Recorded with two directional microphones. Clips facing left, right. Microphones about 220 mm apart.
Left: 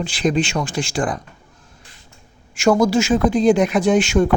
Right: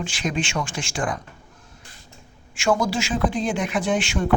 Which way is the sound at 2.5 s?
40° left (ahead or behind).